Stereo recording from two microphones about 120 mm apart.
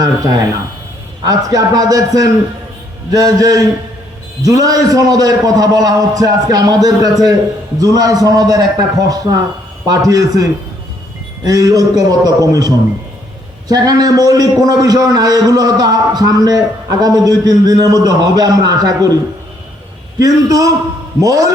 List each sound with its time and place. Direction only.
0.0 s a man's voice: 30° right (ahead or behind)